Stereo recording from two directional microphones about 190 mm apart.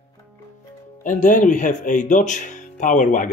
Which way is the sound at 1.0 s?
40° left (ahead or behind).